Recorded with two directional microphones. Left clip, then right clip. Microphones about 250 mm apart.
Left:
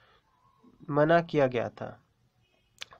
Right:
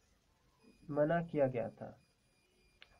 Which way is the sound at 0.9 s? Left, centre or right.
Left.